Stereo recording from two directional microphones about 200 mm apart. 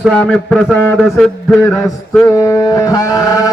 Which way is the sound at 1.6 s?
10° left (ahead or behind).